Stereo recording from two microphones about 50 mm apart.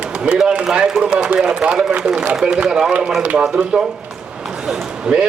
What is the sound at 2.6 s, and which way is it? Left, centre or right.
A man's voice, centre.